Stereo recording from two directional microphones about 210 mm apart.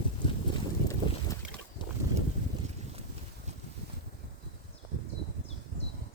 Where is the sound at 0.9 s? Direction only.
15° left (ahead or behind).